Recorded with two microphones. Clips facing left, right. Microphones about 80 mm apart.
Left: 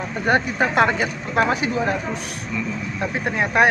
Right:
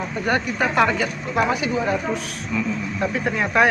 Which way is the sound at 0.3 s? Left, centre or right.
Left.